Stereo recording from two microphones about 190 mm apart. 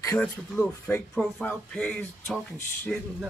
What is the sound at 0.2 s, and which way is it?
Speech, 10° left (ahead or behind).